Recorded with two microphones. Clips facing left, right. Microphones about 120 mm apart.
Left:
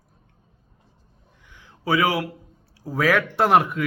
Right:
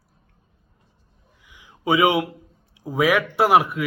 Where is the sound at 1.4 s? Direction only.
10° right (ahead or behind).